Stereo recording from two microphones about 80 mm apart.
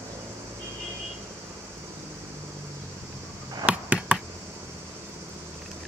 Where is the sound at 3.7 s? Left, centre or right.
Centre.